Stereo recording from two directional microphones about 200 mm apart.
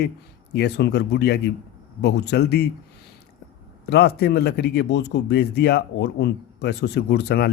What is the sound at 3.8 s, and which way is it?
A man's voice, 55° left (ahead or behind).